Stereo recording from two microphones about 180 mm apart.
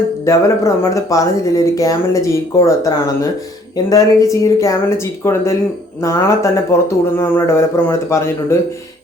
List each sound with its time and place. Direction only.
0.3 s speech: 15° left (ahead or behind)